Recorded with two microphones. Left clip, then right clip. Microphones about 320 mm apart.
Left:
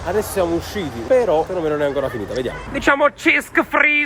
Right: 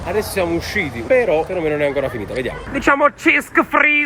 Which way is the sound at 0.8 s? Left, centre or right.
Centre.